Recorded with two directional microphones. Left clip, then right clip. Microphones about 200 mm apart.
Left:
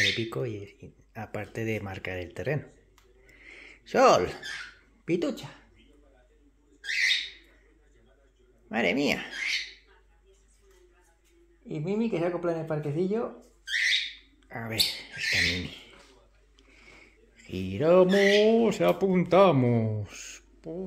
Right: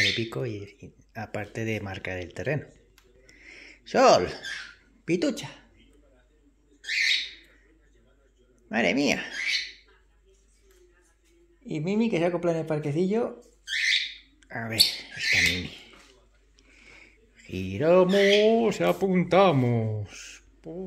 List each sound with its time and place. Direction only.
0.1 s speech: 10° right (ahead or behind)
3.3 s bird: 10° right (ahead or behind)
5.0 s speech: 15° right (ahead or behind)
5.3 s speech: 30° right (ahead or behind)
6.8 s bird: centre (ahead or behind)
8.6 s speech: 10° right (ahead or behind)
9.3 s speech: centre (ahead or behind)
11.6 s speech: 25° right (ahead or behind)
14.5 s speech: 10° right (ahead or behind)
15.1 s speech: centre (ahead or behind)
16.8 s a sound: 5° right (ahead or behind)